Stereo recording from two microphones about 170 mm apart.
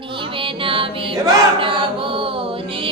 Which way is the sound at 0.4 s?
30° right (ahead or behind).